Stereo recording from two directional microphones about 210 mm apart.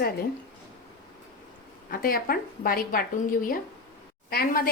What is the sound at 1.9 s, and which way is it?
A woman's voice, 45° left (ahead or behind).